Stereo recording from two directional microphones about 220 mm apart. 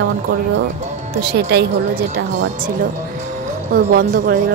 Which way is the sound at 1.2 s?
45° right (ahead or behind).